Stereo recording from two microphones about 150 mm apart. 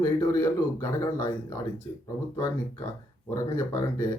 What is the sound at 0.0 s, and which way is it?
Speech, 20° left (ahead or behind).